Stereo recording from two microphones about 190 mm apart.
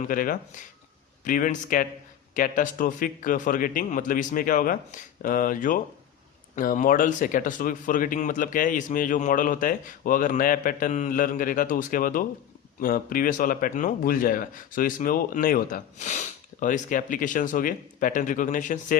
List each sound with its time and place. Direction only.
0.0 s a man's voice: 45° left (ahead or behind)